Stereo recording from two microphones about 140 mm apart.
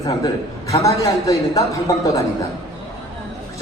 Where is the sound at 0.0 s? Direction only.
25° left (ahead or behind).